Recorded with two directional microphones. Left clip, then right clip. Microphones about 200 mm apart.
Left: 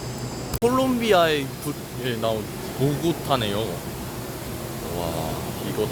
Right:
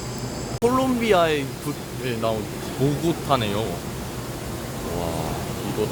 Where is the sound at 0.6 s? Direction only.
Centre (ahead or behind).